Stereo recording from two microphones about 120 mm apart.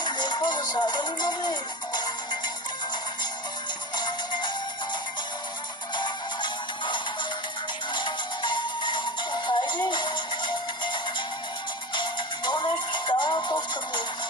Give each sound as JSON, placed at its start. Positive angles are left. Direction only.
{"t": 0.0, "sound": "music", "side_deg": 40}
{"t": 3.9, "sound": "music", "side_deg": 40}
{"t": 6.0, "sound": "music", "side_deg": 40}
{"t": 12.5, "sound": "music", "side_deg": 40}